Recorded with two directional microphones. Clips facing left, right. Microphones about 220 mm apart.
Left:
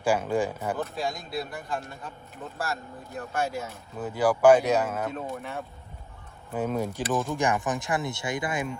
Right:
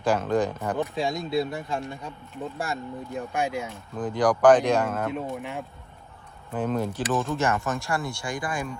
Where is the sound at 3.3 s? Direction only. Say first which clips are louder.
Right 1 dB; 10° right (ahead or behind).